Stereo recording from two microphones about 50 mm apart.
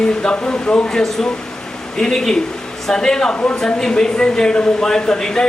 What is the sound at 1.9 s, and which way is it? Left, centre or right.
Speech, centre.